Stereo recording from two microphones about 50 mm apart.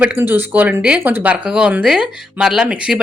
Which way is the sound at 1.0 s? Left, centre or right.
Right.